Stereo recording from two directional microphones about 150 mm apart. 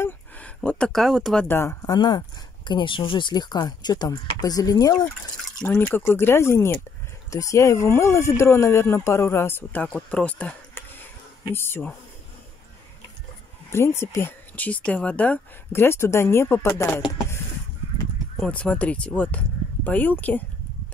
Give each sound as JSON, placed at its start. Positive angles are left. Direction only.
{"t": 0.0, "sound": "a sound", "side_deg": 10}
{"t": 1.5, "sound": "speech", "side_deg": 15}
{"t": 5.7, "sound": "speech", "side_deg": 15}
{"t": 13.7, "sound": "speech", "side_deg": 15}
{"t": 18.4, "sound": "speech", "side_deg": 10}